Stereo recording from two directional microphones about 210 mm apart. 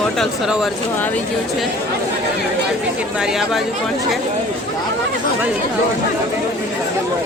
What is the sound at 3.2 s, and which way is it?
Speech, centre (ahead or behind).